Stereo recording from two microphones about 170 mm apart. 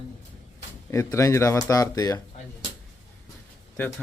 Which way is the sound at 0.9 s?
15° left (ahead or behind).